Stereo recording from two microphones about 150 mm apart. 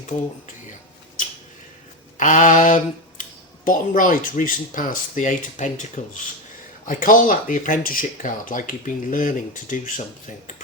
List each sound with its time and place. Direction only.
2.1 s speech: 60° left (ahead or behind)
6.8 s speech: 65° left (ahead or behind)